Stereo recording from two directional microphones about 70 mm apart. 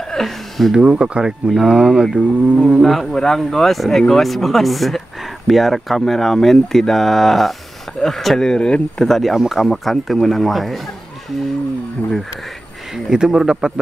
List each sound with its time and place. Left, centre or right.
0.1 s a sound: centre
0.7 s speech: centre
2.8 s speech: centre
9.1 s speech: centre
12.9 s speech: centre